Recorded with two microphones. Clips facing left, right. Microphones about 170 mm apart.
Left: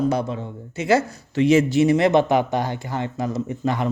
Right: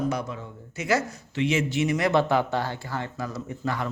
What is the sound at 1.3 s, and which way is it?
Speech, 40° left (ahead or behind).